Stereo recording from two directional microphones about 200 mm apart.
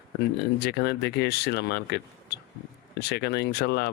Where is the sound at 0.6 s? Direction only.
55° left (ahead or behind).